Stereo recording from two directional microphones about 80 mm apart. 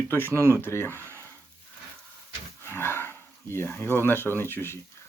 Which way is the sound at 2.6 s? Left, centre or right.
Left.